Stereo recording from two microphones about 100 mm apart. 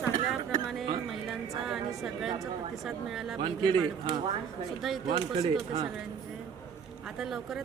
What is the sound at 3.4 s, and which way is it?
Speech, 50° right (ahead or behind).